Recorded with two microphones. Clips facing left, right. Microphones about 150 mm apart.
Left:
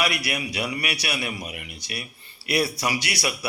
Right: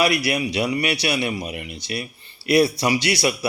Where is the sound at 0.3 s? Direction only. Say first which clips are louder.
Right 7 dB; 25° right (ahead or behind).